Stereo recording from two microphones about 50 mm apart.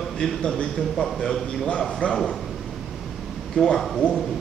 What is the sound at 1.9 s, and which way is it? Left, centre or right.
Speech, centre.